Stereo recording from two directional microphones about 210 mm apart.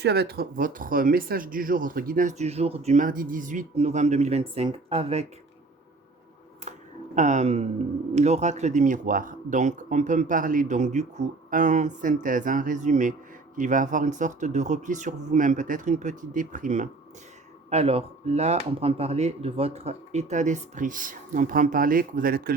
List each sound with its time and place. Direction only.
0.0 s speech: 50° right (ahead or behind); by 5.2 s 30° right (ahead or behind)
6.6 s a sound: 35° right (ahead or behind)
7.2 s speech: 35° right (ahead or behind)